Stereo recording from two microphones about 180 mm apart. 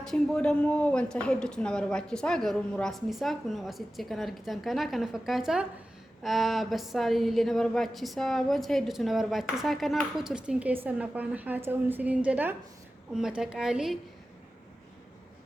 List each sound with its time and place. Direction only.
0.0 s a woman's voice: 5° left (ahead or behind)